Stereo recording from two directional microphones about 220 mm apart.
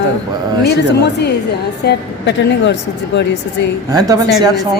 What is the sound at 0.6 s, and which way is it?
A woman's voice, 50° left (ahead or behind).